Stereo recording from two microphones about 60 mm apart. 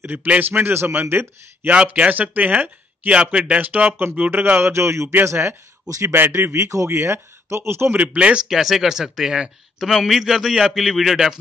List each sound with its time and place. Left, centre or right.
0.0 s speech: right
1.7 s speech: centre; by 4.7 s right
4.7 s speech: right
7.9 s speech: right
8.5 s speech: centre